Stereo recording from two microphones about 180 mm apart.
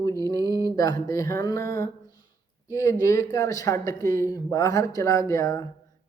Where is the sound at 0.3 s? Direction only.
20° left (ahead or behind).